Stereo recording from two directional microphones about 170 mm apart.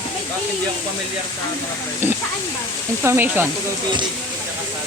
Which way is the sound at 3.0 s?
15° right (ahead or behind).